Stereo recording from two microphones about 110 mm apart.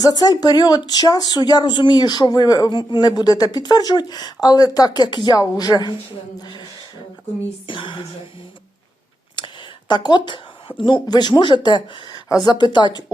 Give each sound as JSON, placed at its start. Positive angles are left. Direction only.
{"t": 0.0, "sound": "speech", "side_deg": 40}
{"t": 7.7, "sound": "speech", "side_deg": 50}
{"t": 9.3, "sound": "speech", "side_deg": 45}